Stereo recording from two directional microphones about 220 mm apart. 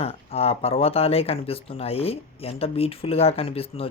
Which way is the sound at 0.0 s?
25° left (ahead or behind).